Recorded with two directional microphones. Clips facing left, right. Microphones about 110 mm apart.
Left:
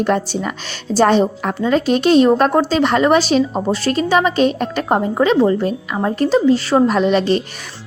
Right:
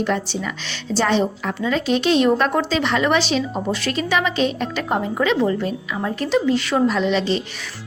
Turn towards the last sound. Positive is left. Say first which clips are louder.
# left 5 dB
turn(degrees=50)  # may be behind; listen again after turning